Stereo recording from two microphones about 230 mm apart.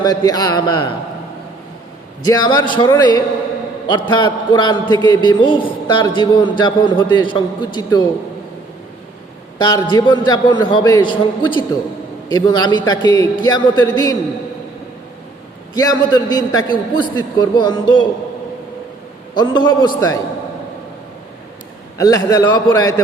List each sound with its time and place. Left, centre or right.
0.0 s a man's voice: centre
2.2 s a man's voice: centre
9.6 s a man's voice: centre
15.7 s a man's voice: centre
19.3 s a man's voice: centre
21.9 s a man's voice: centre